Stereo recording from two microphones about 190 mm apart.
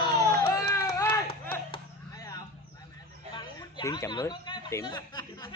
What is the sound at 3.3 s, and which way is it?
Speech, 25° left (ahead or behind).